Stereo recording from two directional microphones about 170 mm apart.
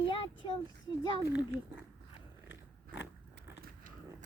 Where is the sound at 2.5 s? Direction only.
90° left.